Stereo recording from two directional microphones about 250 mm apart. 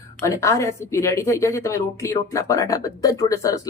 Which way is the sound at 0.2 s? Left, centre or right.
Centre.